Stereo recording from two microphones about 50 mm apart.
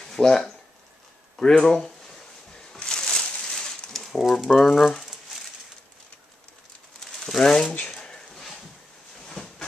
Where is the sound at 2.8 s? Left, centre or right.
Centre.